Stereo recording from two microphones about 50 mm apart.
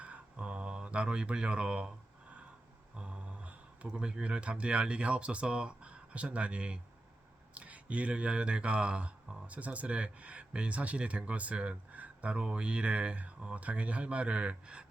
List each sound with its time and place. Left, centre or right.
0.0 s mantra: right
2.9 s a sound: right
3.8 s speech: centre